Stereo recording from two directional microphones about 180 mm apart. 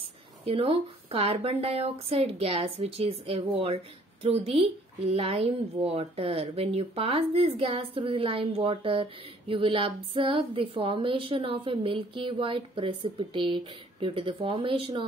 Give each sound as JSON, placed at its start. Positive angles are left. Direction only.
{"t": 0.5, "sound": "speech", "side_deg": -30}